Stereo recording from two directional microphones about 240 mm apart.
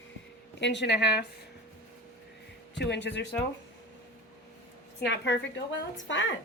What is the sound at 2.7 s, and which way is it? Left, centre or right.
Speech, left.